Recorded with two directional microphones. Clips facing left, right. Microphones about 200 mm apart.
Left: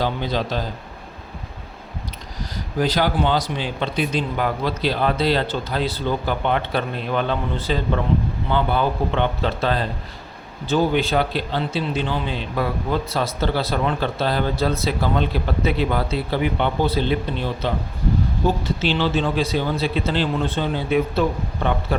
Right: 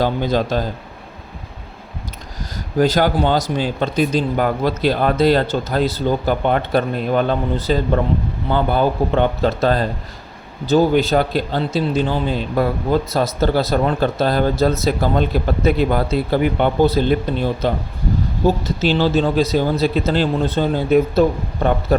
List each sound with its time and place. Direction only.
0.0 s speech: 45° right (ahead or behind)
2.4 s speech: 45° right (ahead or behind)